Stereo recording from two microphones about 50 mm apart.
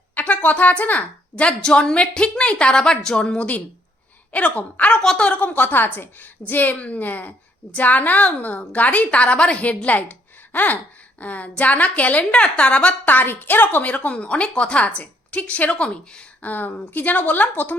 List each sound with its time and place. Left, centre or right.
0.1 s a woman's voice: left
4.9 s a woman's voice: left
12.9 s a woman's voice: left
13.8 s a woman's voice: left
16.4 s a woman's voice: left